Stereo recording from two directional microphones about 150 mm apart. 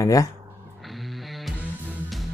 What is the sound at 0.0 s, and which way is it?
Speech, 25° left (ahead or behind).